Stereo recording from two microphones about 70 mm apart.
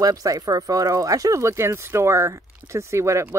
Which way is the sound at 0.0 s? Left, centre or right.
Right.